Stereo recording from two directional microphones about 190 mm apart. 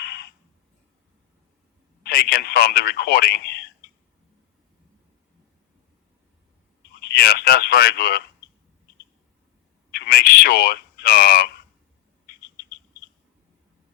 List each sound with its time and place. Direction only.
0.0 s a sound: 55° left (ahead or behind)
2.0 s speech: 50° left (ahead or behind)
6.9 s speech: 55° left (ahead or behind)
9.9 s speech: 55° left (ahead or behind)